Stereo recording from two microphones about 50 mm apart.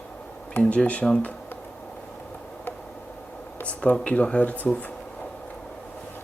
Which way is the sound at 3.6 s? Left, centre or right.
Left.